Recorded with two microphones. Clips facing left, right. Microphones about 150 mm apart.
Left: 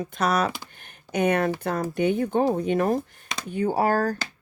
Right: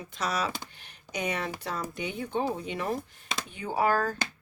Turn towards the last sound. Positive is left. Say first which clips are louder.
# left 5 dB
turn(degrees=40)  # may be behind; listen again after turning